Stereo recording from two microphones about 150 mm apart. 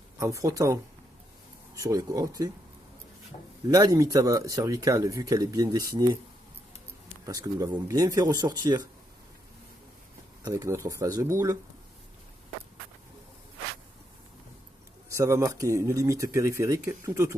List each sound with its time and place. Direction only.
0.2 s speech: 20° right (ahead or behind)
3.7 s speech: 25° right (ahead or behind)
7.3 s speech: 25° right (ahead or behind)
10.4 s speech: 25° right (ahead or behind)
15.1 s speech: 20° right (ahead or behind)